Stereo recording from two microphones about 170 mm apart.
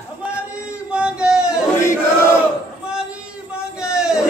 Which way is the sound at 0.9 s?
5° right (ahead or behind).